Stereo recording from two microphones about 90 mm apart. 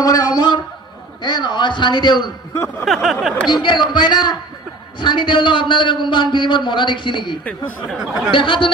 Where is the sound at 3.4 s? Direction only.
55° left (ahead or behind).